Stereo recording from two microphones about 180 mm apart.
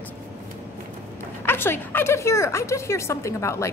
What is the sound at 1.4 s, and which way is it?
A woman's voice, 10° left (ahead or behind).